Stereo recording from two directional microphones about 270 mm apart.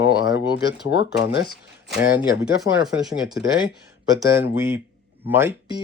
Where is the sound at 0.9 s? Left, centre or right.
Left.